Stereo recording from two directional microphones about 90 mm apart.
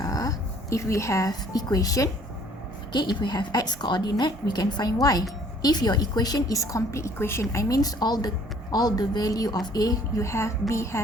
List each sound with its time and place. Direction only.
0.0 s speech: 40° left (ahead or behind)
2.9 s a woman's voice: 55° left (ahead or behind); by 7.4 s 30° left (ahead or behind)
7.5 s a woman's voice: 40° left (ahead or behind)